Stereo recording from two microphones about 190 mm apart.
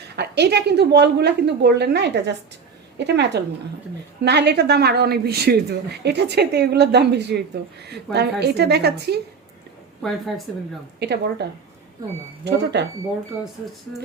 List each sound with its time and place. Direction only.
0.2 s a woman's voice: 60° right (ahead or behind)
10.0 s speech: centre (ahead or behind)
11.0 s a woman's voice: 60° right (ahead or behind)
12.5 s a woman's voice: 60° right (ahead or behind)